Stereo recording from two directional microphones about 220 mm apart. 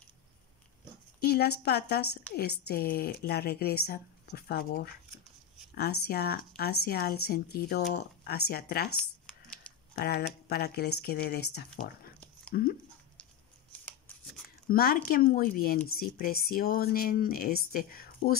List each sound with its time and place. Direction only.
1.2 s speech: 45° left (ahead or behind)
9.9 s speech: 45° left (ahead or behind)
13.8 s shuffling cards: 10° left (ahead or behind)
14.7 s speech: 45° left (ahead or behind)